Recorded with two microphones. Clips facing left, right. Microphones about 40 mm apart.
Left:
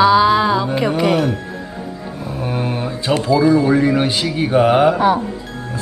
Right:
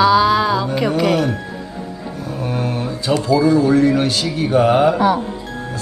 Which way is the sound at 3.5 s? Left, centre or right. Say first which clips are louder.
Even; centre.